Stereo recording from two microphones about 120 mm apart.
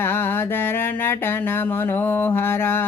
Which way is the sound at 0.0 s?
20° left (ahead or behind).